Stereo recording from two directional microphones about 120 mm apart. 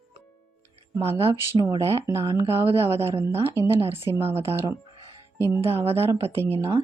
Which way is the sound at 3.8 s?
55° right (ahead or behind).